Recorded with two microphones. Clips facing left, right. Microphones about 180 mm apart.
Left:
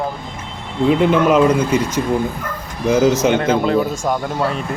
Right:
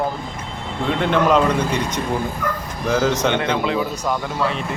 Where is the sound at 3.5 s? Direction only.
40° left (ahead or behind).